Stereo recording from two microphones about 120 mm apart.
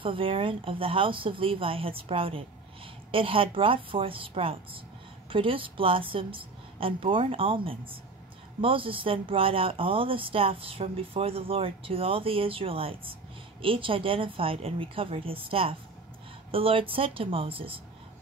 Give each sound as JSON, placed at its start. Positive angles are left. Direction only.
{"t": 0.0, "sound": "speech", "side_deg": -50}